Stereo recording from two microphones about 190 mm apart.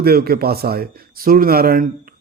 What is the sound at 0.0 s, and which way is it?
Speech, 55° right (ahead or behind).